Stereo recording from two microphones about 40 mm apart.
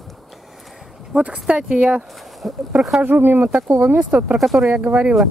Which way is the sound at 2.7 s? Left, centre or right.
Centre.